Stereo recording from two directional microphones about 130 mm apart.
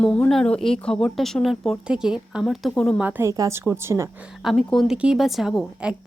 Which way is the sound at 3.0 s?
15° right (ahead or behind).